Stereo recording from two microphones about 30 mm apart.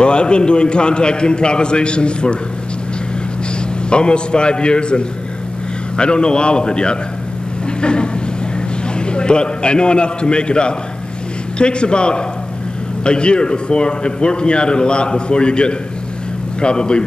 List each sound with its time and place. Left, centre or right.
0.0 s a man's voice: left
3.9 s a man's voice: left
7.8 s a sound: left
11.5 s a man's voice: left